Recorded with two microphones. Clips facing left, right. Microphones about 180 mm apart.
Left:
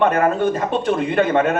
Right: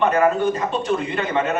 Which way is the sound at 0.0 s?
55° left (ahead or behind).